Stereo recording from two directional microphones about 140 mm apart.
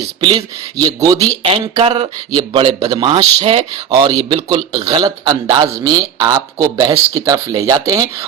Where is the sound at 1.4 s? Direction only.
45° right (ahead or behind).